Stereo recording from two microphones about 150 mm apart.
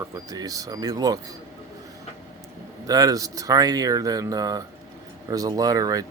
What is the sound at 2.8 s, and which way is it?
Speech, 25° right (ahead or behind).